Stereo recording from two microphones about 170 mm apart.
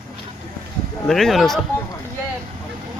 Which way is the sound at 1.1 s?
Centre (ahead or behind).